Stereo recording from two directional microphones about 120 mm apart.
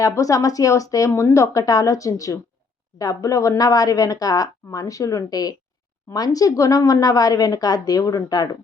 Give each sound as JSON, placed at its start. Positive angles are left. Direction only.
{"t": 0.0, "sound": "a woman's voice", "side_deg": 30}